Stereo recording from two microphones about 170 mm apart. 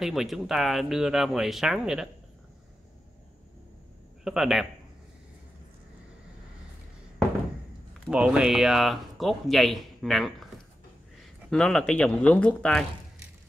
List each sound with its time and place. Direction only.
0.0 s speech: centre (ahead or behind)
4.2 s speech: centre (ahead or behind)
8.1 s speech: 5° right (ahead or behind)
11.5 s speech: 5° left (ahead or behind)